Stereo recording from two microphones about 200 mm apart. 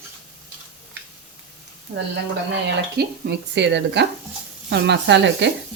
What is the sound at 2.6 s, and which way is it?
Speech, 55° right (ahead or behind).